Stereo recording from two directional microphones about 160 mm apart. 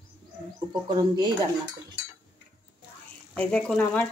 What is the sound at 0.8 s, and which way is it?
Speech, 25° right (ahead or behind).